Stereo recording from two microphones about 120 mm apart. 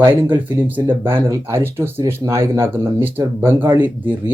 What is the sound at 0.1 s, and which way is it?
Speech, 15° right (ahead or behind).